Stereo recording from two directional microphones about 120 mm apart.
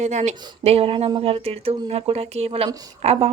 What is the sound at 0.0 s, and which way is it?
A woman's voice, 75° right (ahead or behind).